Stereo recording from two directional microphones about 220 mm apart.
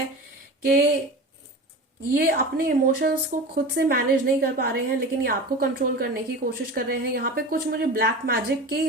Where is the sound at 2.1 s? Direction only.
40° right (ahead or behind).